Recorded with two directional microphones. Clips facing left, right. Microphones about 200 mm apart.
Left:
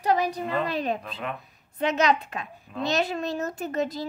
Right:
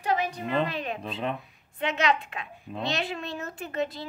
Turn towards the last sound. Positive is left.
turn(degrees=40)  # may be behind; listen again after turning